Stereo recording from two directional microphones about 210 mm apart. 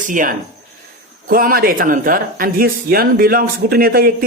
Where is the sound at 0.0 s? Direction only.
40° right (ahead or behind).